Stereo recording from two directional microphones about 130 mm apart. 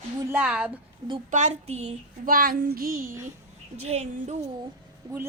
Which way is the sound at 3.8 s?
60° right (ahead or behind).